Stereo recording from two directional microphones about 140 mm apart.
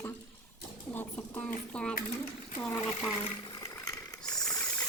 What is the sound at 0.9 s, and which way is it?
Speech, 10° left (ahead or behind).